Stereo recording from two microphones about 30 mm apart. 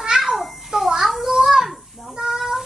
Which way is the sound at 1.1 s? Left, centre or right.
Centre.